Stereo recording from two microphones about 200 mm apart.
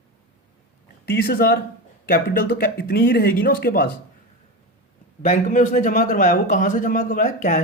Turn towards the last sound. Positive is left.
turn(degrees=40)  # may be behind; listen again after turning